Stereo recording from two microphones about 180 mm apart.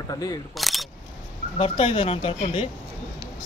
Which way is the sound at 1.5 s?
30° left (ahead or behind).